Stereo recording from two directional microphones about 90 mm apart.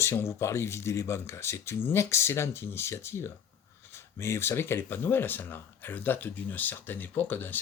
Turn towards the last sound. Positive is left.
turn(degrees=20)  # may be behind; listen again after turning